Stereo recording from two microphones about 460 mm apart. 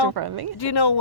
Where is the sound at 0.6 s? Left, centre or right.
Left.